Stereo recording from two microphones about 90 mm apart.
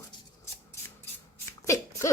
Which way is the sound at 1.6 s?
35° left (ahead or behind).